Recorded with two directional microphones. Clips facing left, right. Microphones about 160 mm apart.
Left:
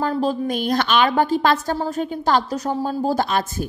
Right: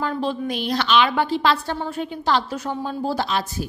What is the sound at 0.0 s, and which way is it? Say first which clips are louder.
A woman's voice: left 3 dB; 40° left (ahead or behind).